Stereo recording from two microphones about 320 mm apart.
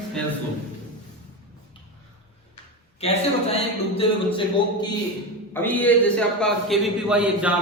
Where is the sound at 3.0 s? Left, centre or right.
Centre.